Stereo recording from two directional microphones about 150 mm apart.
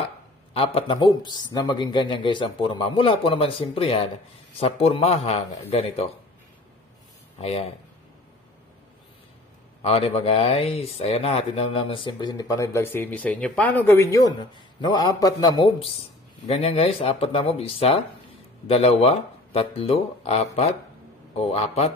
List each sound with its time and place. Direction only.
0.5 s a man's voice: 40° left (ahead or behind)
7.3 s speech: 40° left (ahead or behind)
9.8 s speech: 40° left (ahead or behind); by 13.9 s 10° left (ahead or behind)
14.8 s a man's voice: 25° left (ahead or behind)
16.5 s a man's voice: 40° left (ahead or behind)